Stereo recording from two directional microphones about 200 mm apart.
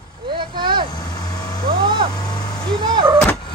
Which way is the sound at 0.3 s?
25° right (ahead or behind).